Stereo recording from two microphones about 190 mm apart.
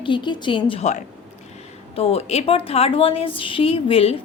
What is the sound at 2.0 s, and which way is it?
A woman's voice, 30° left (ahead or behind).